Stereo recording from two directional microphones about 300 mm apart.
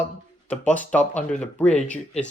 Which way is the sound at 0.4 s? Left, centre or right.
Centre.